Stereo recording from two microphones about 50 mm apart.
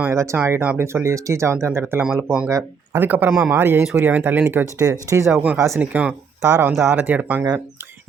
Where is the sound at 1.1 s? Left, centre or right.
Right.